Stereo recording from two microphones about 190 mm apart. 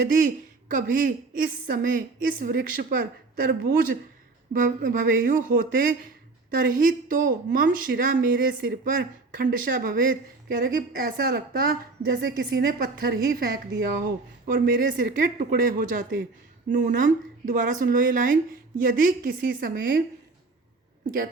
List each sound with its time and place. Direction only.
0.0 s a woman's voice: 50° right (ahead or behind)